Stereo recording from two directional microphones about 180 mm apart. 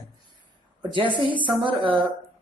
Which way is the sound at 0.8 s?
25° right (ahead or behind).